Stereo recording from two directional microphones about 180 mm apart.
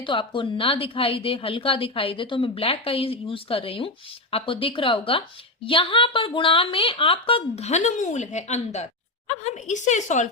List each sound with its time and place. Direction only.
0.0 s a woman's voice: 25° left (ahead or behind); by 10.2 s 40° left (ahead or behind)